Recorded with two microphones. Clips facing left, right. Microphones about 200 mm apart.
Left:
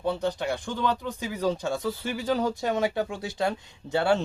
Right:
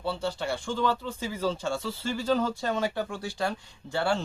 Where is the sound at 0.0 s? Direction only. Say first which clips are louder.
Left 3 dB; 15° left (ahead or behind).